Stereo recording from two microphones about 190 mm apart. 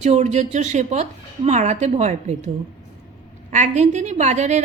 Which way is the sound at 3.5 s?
40° right (ahead or behind).